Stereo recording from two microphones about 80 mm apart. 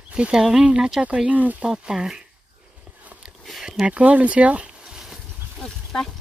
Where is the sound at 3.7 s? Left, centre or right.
Centre.